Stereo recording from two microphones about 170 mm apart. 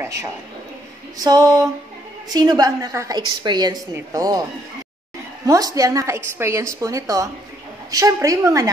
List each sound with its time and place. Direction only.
0.0 s a man's voice: 20° right (ahead or behind)
5.5 s a woman's voice: 20° right (ahead or behind)